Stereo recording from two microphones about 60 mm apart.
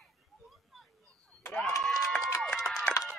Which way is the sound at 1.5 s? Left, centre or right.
Centre.